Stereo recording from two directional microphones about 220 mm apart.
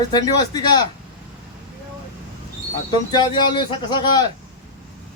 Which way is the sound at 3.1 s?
20° left (ahead or behind).